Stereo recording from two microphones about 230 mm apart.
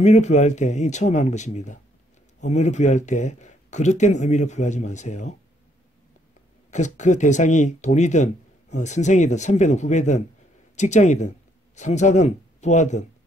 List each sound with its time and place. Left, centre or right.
0.0 s speech: left
6.7 s speech: left